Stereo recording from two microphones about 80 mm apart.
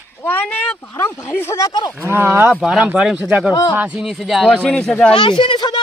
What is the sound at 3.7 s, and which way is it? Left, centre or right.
Speech, centre.